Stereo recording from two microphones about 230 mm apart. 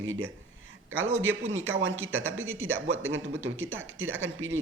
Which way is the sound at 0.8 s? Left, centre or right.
Right.